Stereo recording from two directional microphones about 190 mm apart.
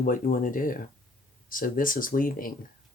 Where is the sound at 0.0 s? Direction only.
45° left (ahead or behind).